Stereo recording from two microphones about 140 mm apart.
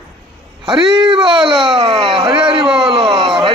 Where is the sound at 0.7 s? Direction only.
30° right (ahead or behind).